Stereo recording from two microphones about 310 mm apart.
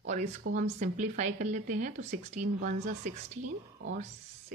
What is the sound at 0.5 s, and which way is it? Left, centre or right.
Speech, right.